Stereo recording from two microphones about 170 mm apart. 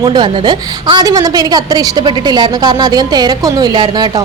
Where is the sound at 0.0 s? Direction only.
25° right (ahead or behind).